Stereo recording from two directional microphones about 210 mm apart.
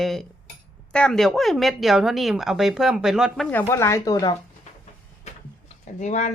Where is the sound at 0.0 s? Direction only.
Centre (ahead or behind).